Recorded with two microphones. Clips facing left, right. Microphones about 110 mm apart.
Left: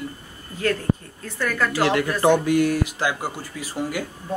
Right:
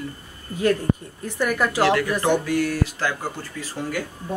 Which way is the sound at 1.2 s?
15° right (ahead or behind).